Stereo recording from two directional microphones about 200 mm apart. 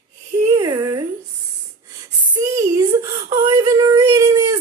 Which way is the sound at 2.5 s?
15° right (ahead or behind).